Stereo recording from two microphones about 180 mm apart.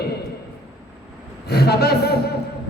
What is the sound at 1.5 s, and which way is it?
Speech, 60° left (ahead or behind).